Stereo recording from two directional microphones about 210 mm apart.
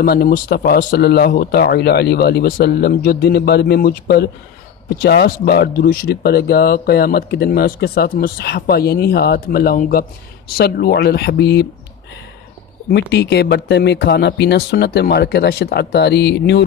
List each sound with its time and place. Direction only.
0.0 s speech: 45° left (ahead or behind)
13.1 s speech: 55° left (ahead or behind)